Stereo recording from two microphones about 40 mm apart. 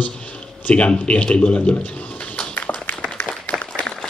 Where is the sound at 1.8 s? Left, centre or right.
Left.